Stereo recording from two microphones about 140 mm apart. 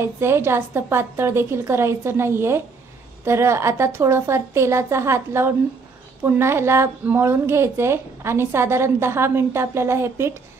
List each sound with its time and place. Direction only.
0.0 s a woman's voice: 20° right (ahead or behind)